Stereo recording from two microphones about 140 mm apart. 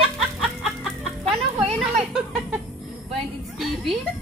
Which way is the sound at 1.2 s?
45° right (ahead or behind).